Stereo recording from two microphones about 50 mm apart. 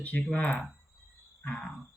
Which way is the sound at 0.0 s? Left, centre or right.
Left.